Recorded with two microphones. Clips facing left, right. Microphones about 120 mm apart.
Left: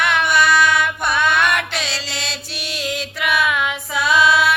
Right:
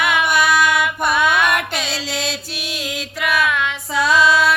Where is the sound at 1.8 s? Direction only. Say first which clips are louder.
Right 4 dB; 45° right (ahead or behind).